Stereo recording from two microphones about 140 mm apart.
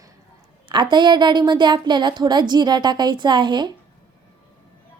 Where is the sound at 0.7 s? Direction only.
35° right (ahead or behind).